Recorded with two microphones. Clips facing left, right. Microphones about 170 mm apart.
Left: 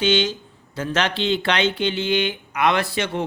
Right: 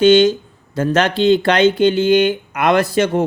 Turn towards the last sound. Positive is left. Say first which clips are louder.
# right 8 dB
turn(degrees=-45)  # may be behind; listen again after turning